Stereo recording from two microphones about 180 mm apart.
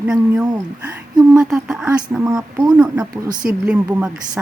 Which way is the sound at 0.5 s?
15° right (ahead or behind).